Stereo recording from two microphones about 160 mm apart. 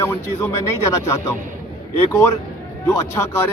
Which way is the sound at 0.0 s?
15° left (ahead or behind).